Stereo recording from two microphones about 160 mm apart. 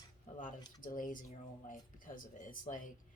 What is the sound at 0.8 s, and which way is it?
Speech, 55° left (ahead or behind).